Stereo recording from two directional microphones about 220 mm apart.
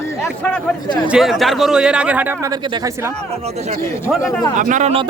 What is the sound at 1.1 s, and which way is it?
Speech, centre (ahead or behind).